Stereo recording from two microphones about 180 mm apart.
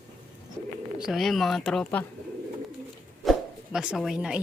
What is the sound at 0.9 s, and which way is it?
Speech, centre (ahead or behind).